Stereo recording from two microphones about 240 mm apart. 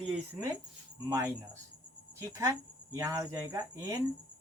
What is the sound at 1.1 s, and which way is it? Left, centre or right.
Speech, centre.